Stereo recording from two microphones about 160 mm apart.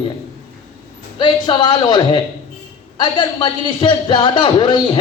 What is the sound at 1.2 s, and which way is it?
Speech, 30° left (ahead or behind).